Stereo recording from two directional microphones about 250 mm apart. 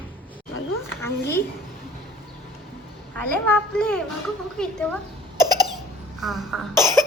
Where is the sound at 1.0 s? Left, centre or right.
Centre.